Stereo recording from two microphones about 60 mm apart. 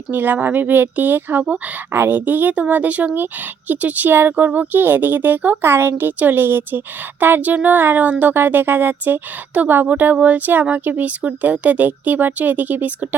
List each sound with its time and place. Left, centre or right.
0.1 s speech: right